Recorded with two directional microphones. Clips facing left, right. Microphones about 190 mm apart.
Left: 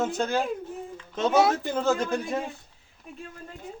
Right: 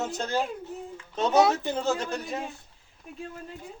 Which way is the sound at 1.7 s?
55° left (ahead or behind).